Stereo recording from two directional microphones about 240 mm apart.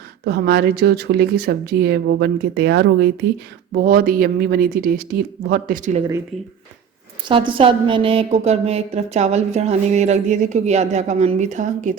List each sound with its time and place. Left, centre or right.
0.3 s speech: right
6.3 s speech: centre
7.3 s a woman's voice: right